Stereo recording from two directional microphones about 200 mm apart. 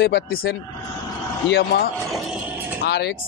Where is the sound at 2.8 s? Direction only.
55° left (ahead or behind).